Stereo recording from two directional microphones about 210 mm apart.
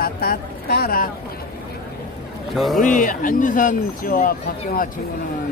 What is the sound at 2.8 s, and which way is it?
Speech, 40° left (ahead or behind).